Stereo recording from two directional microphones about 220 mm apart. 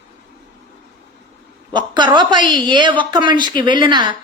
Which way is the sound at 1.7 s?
20° right (ahead or behind).